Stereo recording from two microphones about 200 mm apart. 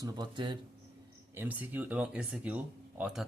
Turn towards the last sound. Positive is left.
turn(degrees=-5)  # may be behind; listen again after turning